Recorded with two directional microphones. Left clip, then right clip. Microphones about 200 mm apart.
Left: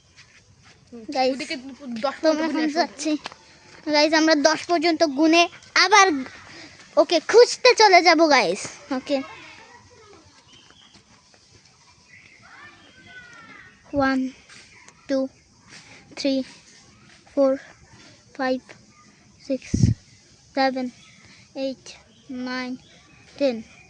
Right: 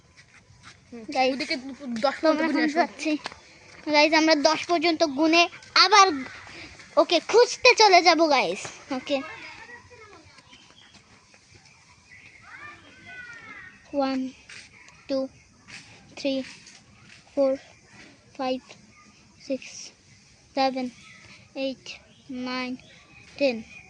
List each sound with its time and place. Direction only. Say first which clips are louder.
1.3 s speech: left 1 dB; 20° right (ahead or behind)
2.2 s a child's voice: left 3 dB; 20° left (ahead or behind)
2.5 s speech: even; 20° right (ahead or behind)
2.7 s a child's voice: left 1 dB; 15° left (ahead or behind)
13.9 s a child's voice: left 4 dB; 25° left (ahead or behind)